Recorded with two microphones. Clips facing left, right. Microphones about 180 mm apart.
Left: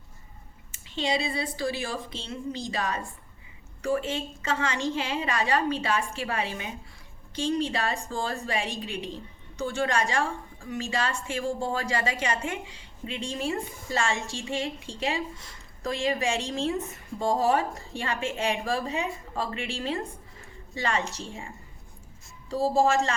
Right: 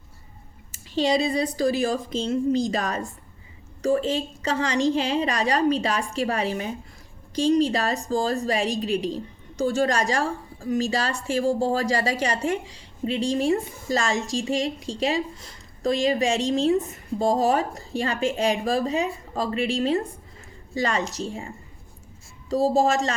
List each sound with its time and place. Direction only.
0.7 s a woman's voice: 40° right (ahead or behind)